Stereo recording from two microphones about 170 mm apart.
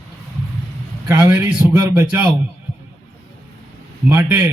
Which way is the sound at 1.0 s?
15° right (ahead or behind).